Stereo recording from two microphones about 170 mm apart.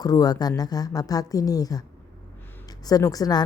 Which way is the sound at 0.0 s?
25° left (ahead or behind).